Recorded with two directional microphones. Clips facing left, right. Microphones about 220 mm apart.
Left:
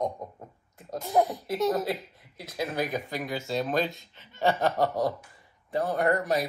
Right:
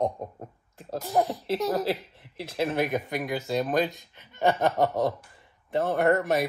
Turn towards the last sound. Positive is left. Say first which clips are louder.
# right 3 dB
turn(degrees=-25)  # may be behind; listen again after turning